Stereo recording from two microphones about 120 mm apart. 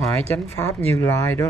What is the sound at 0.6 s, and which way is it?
Speech, 25° left (ahead or behind).